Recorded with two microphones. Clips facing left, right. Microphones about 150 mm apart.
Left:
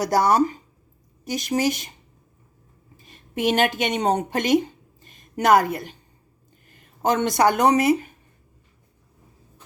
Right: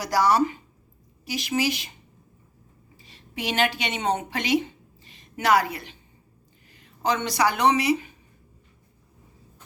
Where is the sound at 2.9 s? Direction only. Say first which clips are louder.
Left 7 dB; 50° left (ahead or behind).